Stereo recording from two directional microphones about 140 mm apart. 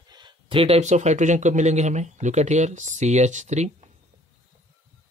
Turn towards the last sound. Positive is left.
turn(degrees=-55)  # may be behind; listen again after turning